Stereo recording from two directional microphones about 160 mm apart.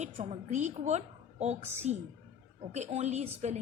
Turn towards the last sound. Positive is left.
turn(degrees=-45)  # may be behind; listen again after turning